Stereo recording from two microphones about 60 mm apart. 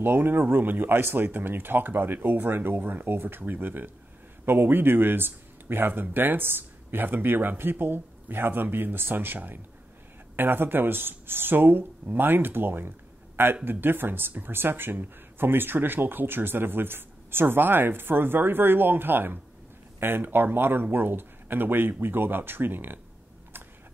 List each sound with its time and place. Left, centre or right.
0.0 s speech: right